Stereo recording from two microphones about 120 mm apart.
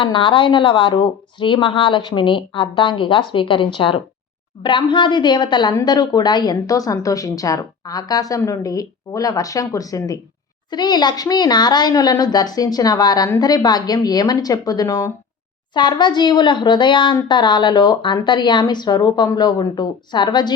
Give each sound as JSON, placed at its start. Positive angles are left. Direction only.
{"t": 0.0, "sound": "a woman's voice", "side_deg": 45}
{"t": 15.7, "sound": "a woman's voice", "side_deg": 40}